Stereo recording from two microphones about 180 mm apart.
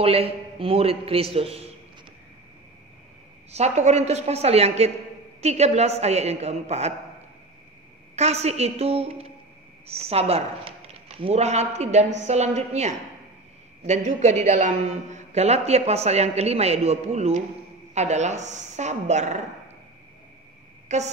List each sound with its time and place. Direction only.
0.0 s a man's voice: 35° right (ahead or behind)
3.5 s a man's voice: 35° right (ahead or behind)
8.2 s a man's voice: 35° right (ahead or behind)
20.9 s a man's voice: 40° right (ahead or behind)